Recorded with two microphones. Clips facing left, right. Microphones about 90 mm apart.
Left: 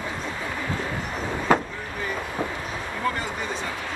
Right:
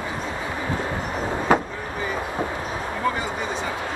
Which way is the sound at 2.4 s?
25° right (ahead or behind).